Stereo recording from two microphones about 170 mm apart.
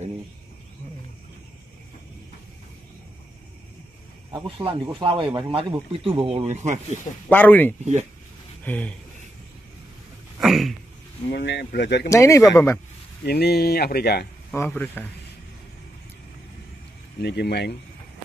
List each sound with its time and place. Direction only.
4.3 s speech: 30° right (ahead or behind)
7.2 s speech: 10° left (ahead or behind)
10.4 s a sound: centre (ahead or behind)
11.3 s speech: 90° left
12.1 s speech: 20° left (ahead or behind)
13.2 s speech: 70° left (ahead or behind)
14.5 s speech: 10° left (ahead or behind)
17.2 s speech: 75° left (ahead or behind)